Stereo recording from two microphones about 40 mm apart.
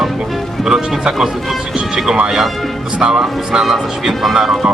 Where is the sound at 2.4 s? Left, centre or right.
Centre.